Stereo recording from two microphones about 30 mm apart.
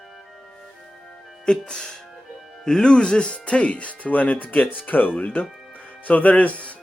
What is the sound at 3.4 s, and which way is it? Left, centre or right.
Speech, left.